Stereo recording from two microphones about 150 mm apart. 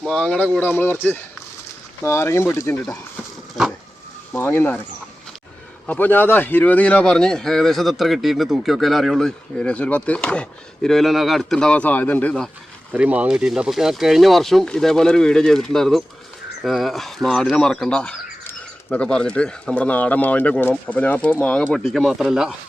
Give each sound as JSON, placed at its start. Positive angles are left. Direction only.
{"t": 0.0, "sound": "speech", "side_deg": 5}
{"t": 3.5, "sound": "a sound", "side_deg": 0}
{"t": 4.3, "sound": "speech", "side_deg": 15}
{"t": 5.8, "sound": "speech", "side_deg": 10}
{"t": 12.9, "sound": "speech", "side_deg": -10}